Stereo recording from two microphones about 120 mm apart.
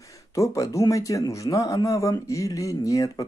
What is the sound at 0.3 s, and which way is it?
A man's voice, 25° left (ahead or behind).